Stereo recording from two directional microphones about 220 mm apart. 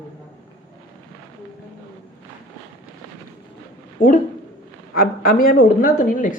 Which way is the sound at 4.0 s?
40° left (ahead or behind).